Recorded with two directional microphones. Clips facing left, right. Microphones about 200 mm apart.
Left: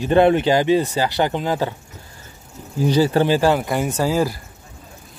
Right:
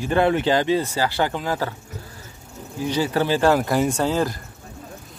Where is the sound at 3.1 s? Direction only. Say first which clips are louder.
Left 4 dB; 15° left (ahead or behind).